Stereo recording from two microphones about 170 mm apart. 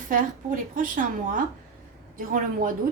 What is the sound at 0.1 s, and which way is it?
A woman's voice, 55° right (ahead or behind).